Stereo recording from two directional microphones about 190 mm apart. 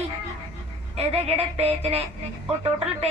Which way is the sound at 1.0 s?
30° right (ahead or behind).